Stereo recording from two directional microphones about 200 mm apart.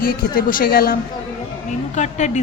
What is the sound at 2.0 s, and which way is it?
Speech, 35° left (ahead or behind).